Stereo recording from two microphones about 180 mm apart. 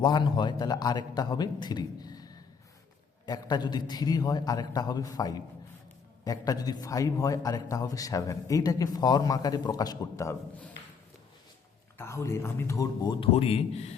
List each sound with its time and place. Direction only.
0.0 s a man's voice: 25° left (ahead or behind)
11.9 s a man's voice: 15° left (ahead or behind); by 13.9 s 35° left (ahead or behind)